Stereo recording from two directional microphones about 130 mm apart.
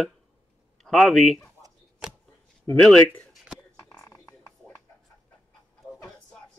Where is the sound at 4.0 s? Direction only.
25° left (ahead or behind).